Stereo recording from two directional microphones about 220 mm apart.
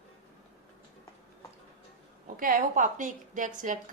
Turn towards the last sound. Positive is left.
turn(degrees=-35)  # may be behind; listen again after turning